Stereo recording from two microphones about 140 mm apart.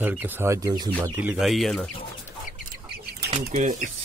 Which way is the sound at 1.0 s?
10° right (ahead or behind).